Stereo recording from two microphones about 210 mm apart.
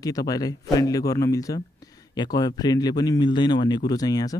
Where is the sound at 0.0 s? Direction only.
15° left (ahead or behind).